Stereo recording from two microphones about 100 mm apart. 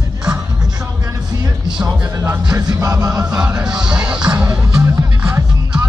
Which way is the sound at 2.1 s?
30° right (ahead or behind).